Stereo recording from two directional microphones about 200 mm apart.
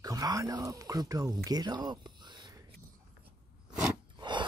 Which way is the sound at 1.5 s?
20° right (ahead or behind).